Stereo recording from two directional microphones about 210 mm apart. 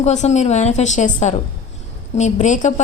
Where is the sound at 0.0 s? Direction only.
35° left (ahead or behind).